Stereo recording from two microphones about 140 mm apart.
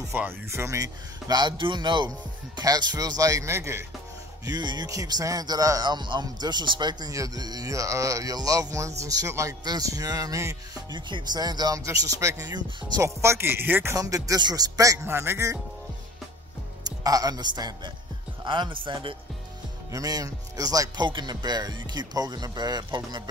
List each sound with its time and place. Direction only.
0.1 s speech: 15° right (ahead or behind)
4.5 s speech: 30° right (ahead or behind)
13.2 s speech: 20° right (ahead or behind)
16.8 s a man's voice: 25° right (ahead or behind)
19.9 s speech: 25° right (ahead or behind)